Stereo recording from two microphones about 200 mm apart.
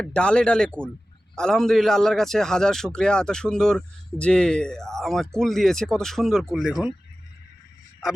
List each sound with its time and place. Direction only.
0.0 s a man's voice: 5° left (ahead or behind)